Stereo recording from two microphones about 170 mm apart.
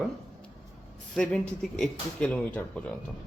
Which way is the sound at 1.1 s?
5° left (ahead or behind).